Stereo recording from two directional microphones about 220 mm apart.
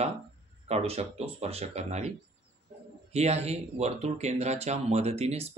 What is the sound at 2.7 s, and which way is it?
Bird, 30° right (ahead or behind).